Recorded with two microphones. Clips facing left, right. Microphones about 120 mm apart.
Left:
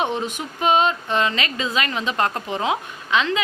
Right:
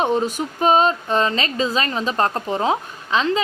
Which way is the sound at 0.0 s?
40° right (ahead or behind).